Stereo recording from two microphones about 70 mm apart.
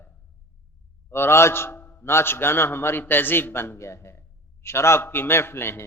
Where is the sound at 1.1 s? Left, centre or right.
Left.